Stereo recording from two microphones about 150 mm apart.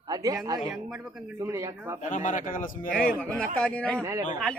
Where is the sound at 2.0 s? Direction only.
60° left (ahead or behind).